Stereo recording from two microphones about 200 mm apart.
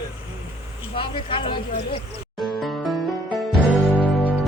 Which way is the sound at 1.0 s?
25° left (ahead or behind).